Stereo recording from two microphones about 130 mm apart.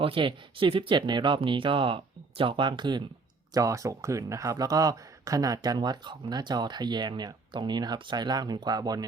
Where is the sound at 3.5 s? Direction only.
25° right (ahead or behind).